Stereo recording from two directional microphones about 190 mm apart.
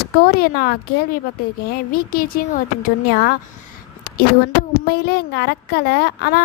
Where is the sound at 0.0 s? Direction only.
50° left (ahead or behind).